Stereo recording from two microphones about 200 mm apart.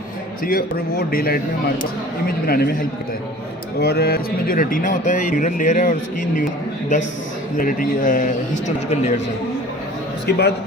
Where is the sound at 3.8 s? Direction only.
55° left (ahead or behind).